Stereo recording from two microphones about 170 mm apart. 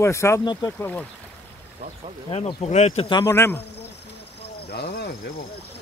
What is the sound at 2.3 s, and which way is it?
Speech, 40° left (ahead or behind).